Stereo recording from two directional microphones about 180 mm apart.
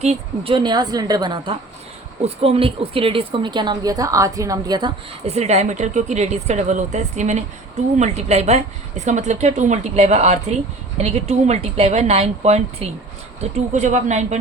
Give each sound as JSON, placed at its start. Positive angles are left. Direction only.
{"t": 0.0, "sound": "a woman's voice", "side_deg": -35}
{"t": 5.2, "sound": "speech", "side_deg": -35}